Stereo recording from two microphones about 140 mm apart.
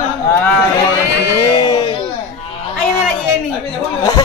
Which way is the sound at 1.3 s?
30° left (ahead or behind).